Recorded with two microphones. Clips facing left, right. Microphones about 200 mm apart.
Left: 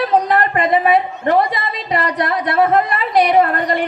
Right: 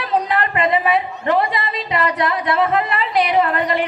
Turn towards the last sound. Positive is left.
turn(degrees=45)  # may be behind; listen again after turning